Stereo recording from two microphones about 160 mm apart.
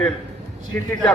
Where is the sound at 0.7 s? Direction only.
10° left (ahead or behind).